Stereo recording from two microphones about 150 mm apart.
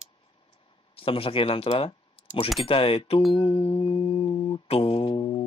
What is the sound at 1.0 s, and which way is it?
Speech, 40° left (ahead or behind).